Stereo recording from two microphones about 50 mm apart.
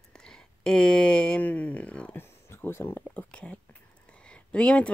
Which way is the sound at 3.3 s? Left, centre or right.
Left.